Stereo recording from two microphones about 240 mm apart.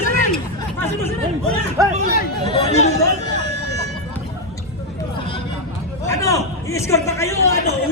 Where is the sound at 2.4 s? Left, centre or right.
Left.